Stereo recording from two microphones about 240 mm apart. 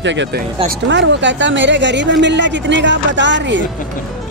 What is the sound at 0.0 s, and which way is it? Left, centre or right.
A woman's voice, right.